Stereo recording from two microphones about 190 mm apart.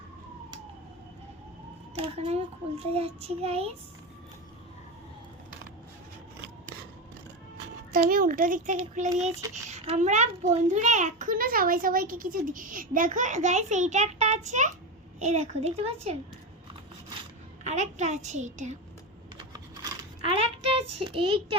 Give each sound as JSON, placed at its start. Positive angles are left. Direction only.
{"t": 2.1, "sound": "a child's voice", "side_deg": -35}
{"t": 7.9, "sound": "a child's voice", "side_deg": -45}
{"t": 8.7, "sound": "a child's voice", "side_deg": -30}
{"t": 17.6, "sound": "a child's voice", "side_deg": -40}
{"t": 19.5, "sound": "a sound", "side_deg": -20}